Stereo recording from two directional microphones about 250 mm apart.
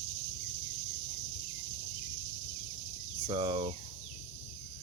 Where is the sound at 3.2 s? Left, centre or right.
Centre.